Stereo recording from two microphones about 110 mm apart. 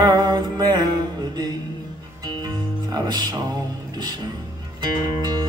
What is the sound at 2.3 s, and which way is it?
Music, 40° right (ahead or behind).